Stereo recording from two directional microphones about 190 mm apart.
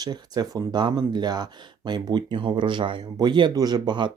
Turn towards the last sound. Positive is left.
turn(degrees=-25)  # may be behind; listen again after turning